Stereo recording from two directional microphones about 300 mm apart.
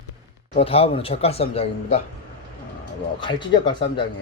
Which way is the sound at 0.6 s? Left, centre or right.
Centre.